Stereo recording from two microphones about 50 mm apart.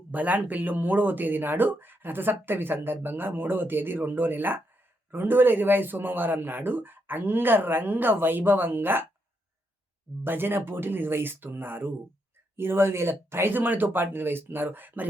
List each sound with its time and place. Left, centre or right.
0.1 s speech: right
10.2 s speech: right
13.5 s speech: right